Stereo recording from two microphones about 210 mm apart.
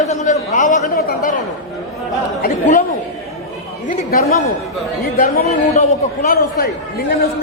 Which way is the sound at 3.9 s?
45° left (ahead or behind).